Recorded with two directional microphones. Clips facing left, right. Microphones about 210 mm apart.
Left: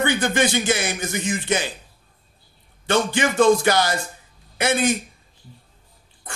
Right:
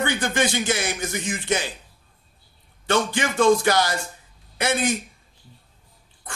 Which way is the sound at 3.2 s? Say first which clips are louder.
Left 2 dB; 20° left (ahead or behind).